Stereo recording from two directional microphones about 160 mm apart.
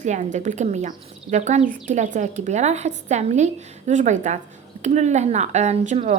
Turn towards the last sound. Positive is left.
turn(degrees=-45)  # may be behind; listen again after turning